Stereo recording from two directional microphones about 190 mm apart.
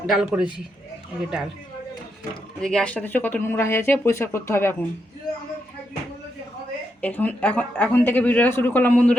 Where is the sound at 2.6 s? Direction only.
5° left (ahead or behind).